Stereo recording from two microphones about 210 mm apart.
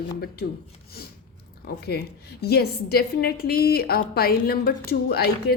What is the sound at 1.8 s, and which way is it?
A woman's voice, 50° left (ahead or behind).